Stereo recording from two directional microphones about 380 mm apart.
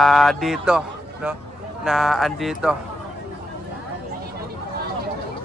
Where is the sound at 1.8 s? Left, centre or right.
Centre.